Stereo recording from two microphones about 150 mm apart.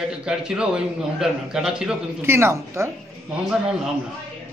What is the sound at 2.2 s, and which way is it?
Speech, 15° right (ahead or behind).